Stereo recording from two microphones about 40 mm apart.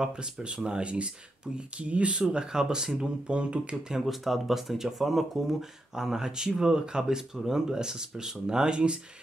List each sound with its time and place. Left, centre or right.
0.0 s speech: right
2.3 s speech: centre
3.3 s speech: right
4.0 s speech: centre; by 9.0 s right